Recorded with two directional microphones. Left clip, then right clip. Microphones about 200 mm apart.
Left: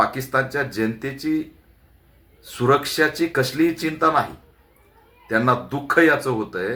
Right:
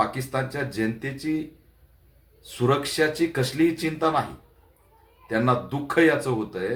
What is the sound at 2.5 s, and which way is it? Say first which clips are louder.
Speech: left 5 dB; centre (ahead or behind).